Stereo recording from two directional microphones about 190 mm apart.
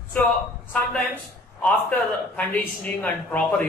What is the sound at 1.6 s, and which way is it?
A man's voice, 10° left (ahead or behind).